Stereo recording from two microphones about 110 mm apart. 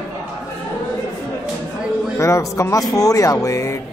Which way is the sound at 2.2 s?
25° left (ahead or behind).